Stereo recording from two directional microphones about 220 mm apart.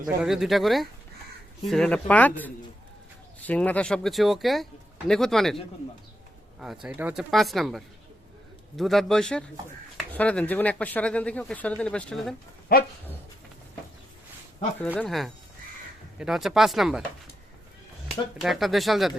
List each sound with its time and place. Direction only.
0.2 s speech: centre (ahead or behind)
6.6 s speech: 5° right (ahead or behind)
12.7 s dog: 45° left (ahead or behind)
14.9 s speech: centre (ahead or behind)
18.4 s speech: centre (ahead or behind)